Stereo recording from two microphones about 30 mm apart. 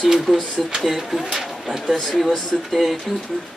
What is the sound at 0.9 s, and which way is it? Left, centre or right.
Speech, centre.